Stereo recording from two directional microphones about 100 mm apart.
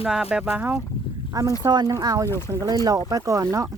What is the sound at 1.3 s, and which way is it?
Speech, 35° right (ahead or behind).